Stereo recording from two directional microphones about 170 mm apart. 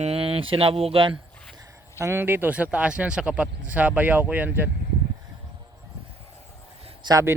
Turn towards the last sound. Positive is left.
turn(degrees=-20)  # may be behind; listen again after turning